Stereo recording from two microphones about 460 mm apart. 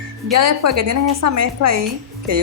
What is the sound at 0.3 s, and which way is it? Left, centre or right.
Speech, right.